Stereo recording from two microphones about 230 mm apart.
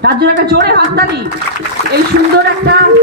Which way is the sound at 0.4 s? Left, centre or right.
Right.